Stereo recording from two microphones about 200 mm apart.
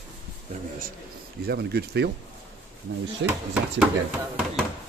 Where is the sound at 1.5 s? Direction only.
55° right (ahead or behind).